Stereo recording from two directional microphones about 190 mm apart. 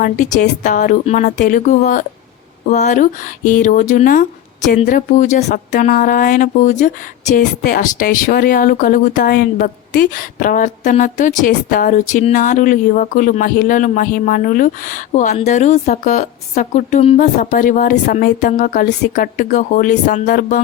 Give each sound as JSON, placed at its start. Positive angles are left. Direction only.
{"t": 0.0, "sound": "speech", "side_deg": 40}